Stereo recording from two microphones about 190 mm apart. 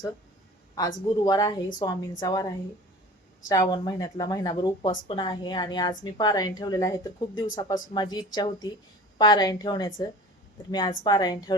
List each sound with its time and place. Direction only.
1.2 s a woman's voice: 20° left (ahead or behind)
3.5 s a woman's voice: 20° left (ahead or behind)